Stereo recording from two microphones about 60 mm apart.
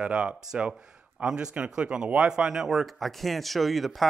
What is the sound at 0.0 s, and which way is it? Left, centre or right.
Speech, centre.